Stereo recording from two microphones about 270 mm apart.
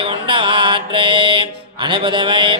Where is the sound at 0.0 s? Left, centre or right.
Centre.